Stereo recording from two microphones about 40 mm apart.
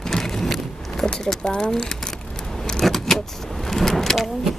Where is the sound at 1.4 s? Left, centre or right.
Centre.